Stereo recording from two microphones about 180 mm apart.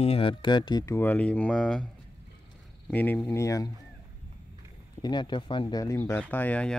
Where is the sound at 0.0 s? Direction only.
30° left (ahead or behind); by 1.9 s 5° left (ahead or behind).